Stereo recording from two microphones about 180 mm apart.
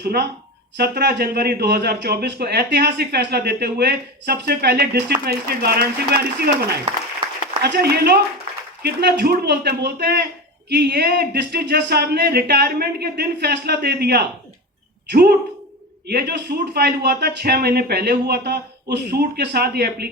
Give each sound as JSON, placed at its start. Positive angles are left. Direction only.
{"t": 0.0, "sound": "a man's voice", "side_deg": -60}
{"t": 7.6, "sound": "a man's voice", "side_deg": -60}